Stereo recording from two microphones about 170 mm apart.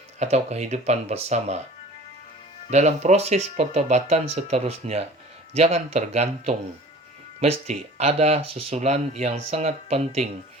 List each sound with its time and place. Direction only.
0.2 s speech: 40° right (ahead or behind)
2.6 s speech: 40° right (ahead or behind)